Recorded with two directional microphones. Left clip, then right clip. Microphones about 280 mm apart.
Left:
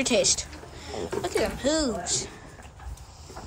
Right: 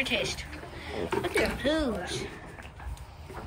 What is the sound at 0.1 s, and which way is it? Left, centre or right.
Speech, centre.